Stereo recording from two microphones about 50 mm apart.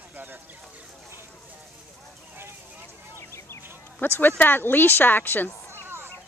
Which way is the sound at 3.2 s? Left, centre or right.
Left.